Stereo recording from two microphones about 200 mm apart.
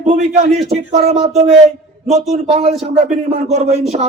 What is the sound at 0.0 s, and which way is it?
Speech, 35° right (ahead or behind).